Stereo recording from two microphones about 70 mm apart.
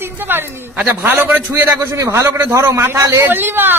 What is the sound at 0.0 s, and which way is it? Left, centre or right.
A woman's voice, right.